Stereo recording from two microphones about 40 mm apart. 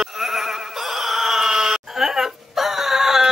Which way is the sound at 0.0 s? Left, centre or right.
Centre.